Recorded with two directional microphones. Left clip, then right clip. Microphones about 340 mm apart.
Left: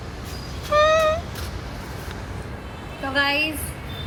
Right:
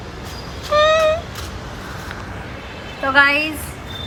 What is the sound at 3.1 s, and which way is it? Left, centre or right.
Speech, centre.